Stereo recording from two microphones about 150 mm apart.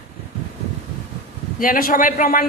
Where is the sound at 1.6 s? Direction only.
70° left (ahead or behind).